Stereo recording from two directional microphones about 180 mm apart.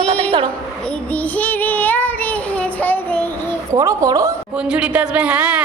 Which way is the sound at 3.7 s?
20° right (ahead or behind).